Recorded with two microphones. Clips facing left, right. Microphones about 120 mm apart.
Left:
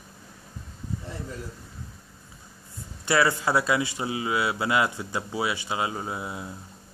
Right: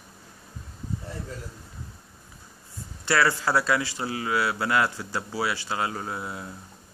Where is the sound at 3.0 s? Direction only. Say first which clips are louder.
Left 1 dB; 20° left (ahead or behind).